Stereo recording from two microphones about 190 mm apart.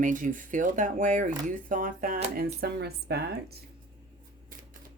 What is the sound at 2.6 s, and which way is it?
Speech, 60° right (ahead or behind).